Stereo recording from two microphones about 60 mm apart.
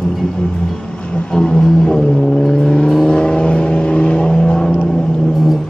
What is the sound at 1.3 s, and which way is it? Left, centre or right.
Vehicle, centre.